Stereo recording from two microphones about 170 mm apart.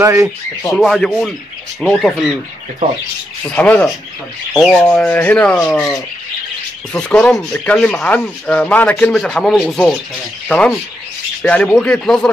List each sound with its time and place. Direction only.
0.0 s speech: 15° right (ahead or behind)
0.7 s speech: centre (ahead or behind)
3.4 s rub: 10° left (ahead or behind)
6.9 s speech: 5° left (ahead or behind)
11.4 s speech: 5° left (ahead or behind)